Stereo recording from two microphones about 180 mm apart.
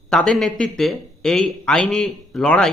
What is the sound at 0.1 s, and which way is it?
Speech, centre (ahead or behind).